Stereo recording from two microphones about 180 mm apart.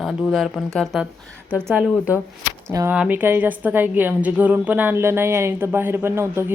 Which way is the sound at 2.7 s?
15° right (ahead or behind).